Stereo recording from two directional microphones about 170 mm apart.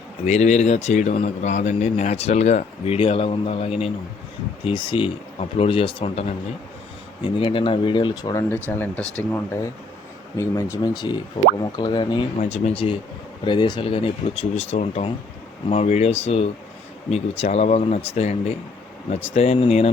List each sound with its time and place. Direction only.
0.3 s a man's voice: 40° left (ahead or behind)
7.3 s speech: 30° left (ahead or behind)
12.4 s a man's voice: 40° left (ahead or behind)